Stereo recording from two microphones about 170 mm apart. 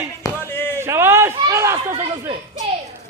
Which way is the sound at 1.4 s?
20° right (ahead or behind).